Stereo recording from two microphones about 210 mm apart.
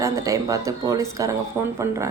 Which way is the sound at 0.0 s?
15° right (ahead or behind).